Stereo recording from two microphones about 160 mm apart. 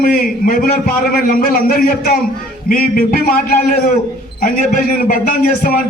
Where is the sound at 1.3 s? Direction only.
65° left (ahead or behind).